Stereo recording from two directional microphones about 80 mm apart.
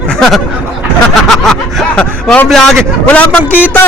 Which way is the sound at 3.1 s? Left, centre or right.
Centre.